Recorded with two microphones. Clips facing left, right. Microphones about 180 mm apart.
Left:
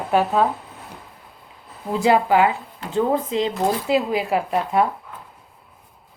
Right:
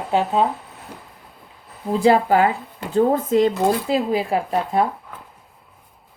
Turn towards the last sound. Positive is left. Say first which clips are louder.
# even
turn(degrees=-35)  # may be behind; listen again after turning